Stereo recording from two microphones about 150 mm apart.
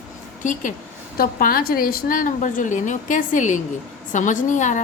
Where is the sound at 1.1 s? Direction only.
75° left (ahead or behind); by 4.8 s 55° left (ahead or behind).